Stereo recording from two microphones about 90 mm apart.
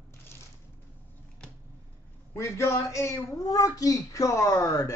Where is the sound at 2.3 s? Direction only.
30° left (ahead or behind).